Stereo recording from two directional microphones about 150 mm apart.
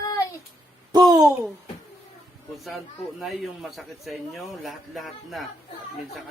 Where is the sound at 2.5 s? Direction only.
Centre (ahead or behind).